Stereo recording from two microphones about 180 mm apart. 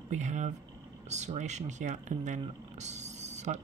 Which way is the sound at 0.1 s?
40° right (ahead or behind).